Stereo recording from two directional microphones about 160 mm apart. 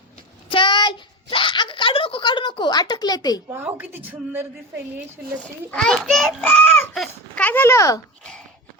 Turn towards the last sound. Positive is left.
turn(degrees=20)  # may be behind; listen again after turning